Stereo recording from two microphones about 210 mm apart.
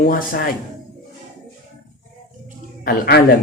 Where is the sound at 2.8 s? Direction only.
45° left (ahead or behind).